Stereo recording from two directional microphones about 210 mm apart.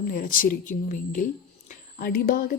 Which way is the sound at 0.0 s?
40° left (ahead or behind).